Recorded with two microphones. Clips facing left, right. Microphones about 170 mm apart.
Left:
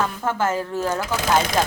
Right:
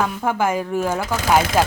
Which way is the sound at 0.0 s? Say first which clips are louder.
Right 2 dB; 10° right (ahead or behind).